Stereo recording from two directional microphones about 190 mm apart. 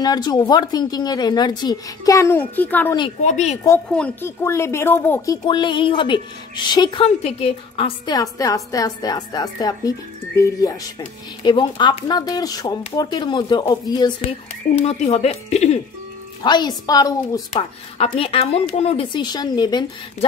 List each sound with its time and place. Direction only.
0.0 s speech: 20° left (ahead or behind)
3.2 s speech: 40° left (ahead or behind)
3.6 s speech: 10° left (ahead or behind)
5.4 s speech: 25° left (ahead or behind)
14.8 s speech: 35° left (ahead or behind)
16.4 s speech: 20° left (ahead or behind)
17.6 s speech: 30° left (ahead or behind)